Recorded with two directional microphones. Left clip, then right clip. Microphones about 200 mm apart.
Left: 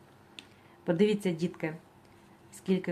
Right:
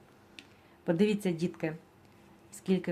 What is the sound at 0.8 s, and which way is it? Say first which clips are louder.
A woman's voice: left 2 dB; 15° right (ahead or behind).